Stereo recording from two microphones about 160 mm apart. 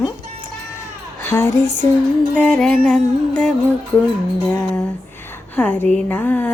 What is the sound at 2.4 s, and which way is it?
Speech, 5° left (ahead or behind).